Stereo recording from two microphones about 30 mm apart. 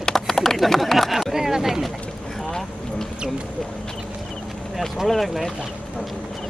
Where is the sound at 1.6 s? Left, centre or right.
Centre.